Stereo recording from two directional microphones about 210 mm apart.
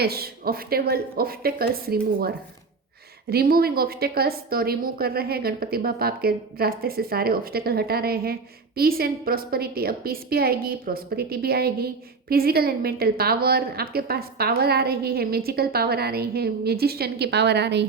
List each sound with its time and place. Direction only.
0.0 s a woman's voice: 50° right (ahead or behind)